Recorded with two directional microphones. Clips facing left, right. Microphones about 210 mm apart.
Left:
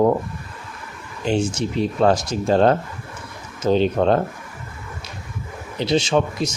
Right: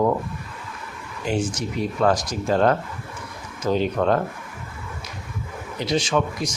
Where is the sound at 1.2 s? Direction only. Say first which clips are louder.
Left 4 dB; 25° left (ahead or behind).